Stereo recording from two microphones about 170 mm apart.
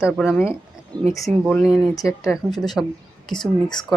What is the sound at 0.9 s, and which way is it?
Speech, 25° right (ahead or behind).